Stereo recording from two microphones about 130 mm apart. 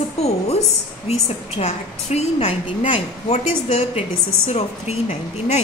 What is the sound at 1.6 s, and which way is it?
A woman's voice, 55° left (ahead or behind).